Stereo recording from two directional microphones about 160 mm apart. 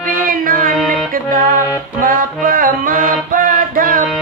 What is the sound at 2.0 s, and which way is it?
Music, 60° right (ahead or behind).